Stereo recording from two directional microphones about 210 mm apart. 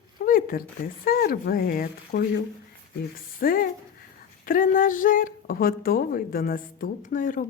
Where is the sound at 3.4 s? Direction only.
45° left (ahead or behind).